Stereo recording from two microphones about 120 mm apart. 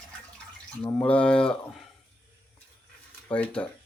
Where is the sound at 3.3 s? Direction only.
10° left (ahead or behind).